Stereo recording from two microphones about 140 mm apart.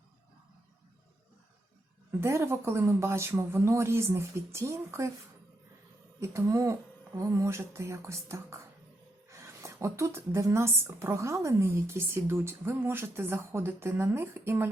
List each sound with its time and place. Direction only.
2.2 s speech: 20° right (ahead or behind)
6.1 s speech: 20° right (ahead or behind)